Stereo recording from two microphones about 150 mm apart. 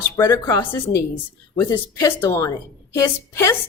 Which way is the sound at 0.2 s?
20° left (ahead or behind).